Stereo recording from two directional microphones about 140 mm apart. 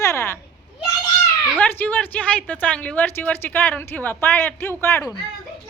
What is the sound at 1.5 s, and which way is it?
A woman's voice, 10° left (ahead or behind).